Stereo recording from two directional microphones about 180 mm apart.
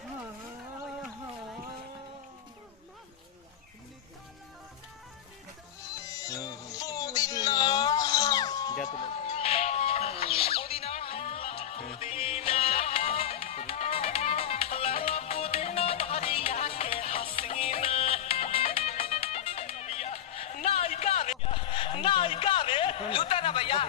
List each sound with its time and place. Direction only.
6.1 s music: 20° left (ahead or behind)
9.3 s music: 35° left (ahead or behind)